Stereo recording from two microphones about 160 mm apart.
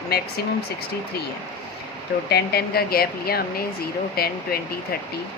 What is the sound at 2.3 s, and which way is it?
Speech, 85° left.